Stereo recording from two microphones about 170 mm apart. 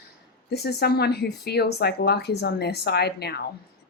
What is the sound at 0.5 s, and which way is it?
A woman's voice, 70° left (ahead or behind).